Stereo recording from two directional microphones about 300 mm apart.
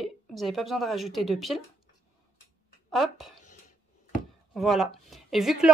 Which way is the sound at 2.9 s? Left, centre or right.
Centre.